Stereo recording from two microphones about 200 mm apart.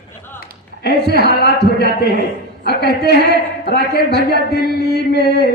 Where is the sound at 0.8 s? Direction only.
55° left (ahead or behind).